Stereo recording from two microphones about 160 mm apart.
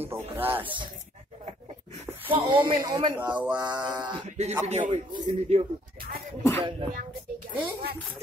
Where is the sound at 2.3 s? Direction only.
30° right (ahead or behind).